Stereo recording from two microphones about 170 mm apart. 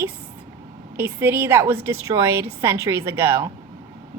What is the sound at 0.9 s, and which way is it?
A woman's voice, 15° right (ahead or behind).